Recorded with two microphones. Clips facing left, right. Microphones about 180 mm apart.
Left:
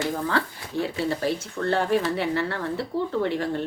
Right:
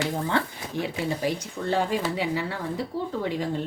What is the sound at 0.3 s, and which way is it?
Speech, 20° right (ahead or behind).